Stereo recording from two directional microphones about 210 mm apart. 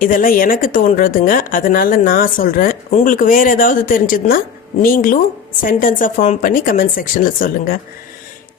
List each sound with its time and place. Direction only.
0.0 s a woman's voice: 40° left (ahead or behind)